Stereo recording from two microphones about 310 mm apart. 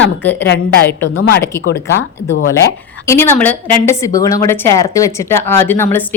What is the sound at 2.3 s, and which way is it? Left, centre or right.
Speech, left.